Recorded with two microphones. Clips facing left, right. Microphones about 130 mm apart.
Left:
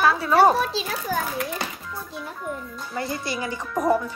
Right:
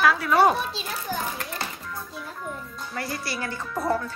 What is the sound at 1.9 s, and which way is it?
Speech, centre (ahead or behind).